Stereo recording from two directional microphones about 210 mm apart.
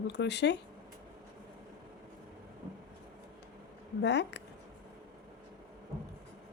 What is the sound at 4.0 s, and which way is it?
Speech, 55° left (ahead or behind).